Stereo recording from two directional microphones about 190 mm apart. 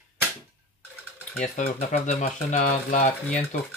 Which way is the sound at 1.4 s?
40° left (ahead or behind).